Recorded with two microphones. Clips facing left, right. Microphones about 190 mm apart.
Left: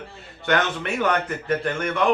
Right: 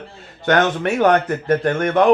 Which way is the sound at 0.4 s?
45° right (ahead or behind).